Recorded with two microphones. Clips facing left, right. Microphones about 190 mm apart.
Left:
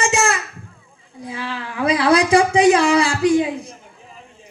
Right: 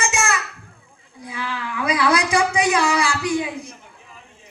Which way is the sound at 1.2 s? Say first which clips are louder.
Left 1 dB; 30° left (ahead or behind).